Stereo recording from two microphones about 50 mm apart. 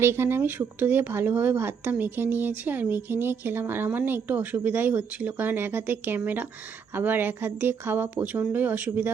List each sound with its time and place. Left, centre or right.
0.0 s a woman's voice: right
8.1 s speech: right